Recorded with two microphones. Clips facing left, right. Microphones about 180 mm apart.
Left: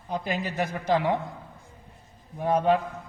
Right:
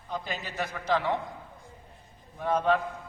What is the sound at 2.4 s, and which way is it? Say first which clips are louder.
Speech: left 3 dB; 15° left (ahead or behind).